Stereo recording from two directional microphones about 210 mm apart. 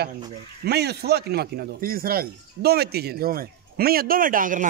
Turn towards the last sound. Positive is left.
turn(degrees=-40)  # may be behind; listen again after turning